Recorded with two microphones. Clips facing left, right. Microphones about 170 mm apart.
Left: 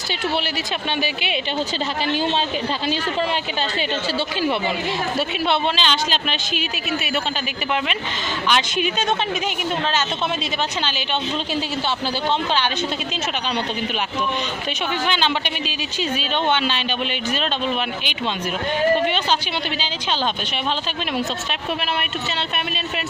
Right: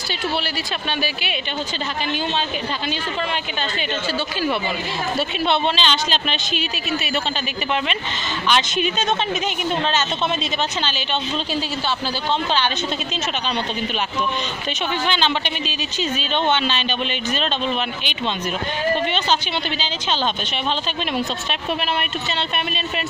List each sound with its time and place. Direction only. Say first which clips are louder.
5.5 s speech: right 1 dB; 10° left (ahead or behind)
8.5 s speech: right 1 dB; 10° left (ahead or behind)
15.0 s speech: right 1 dB; 10° left (ahead or behind)
19.0 s speech: left 1 dB; 10° left (ahead or behind)